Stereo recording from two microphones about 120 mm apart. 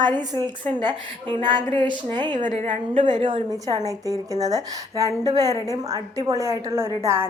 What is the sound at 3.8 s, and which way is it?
A woman's voice, 30° right (ahead or behind).